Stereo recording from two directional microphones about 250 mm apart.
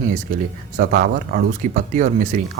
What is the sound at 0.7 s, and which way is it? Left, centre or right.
Speech, right.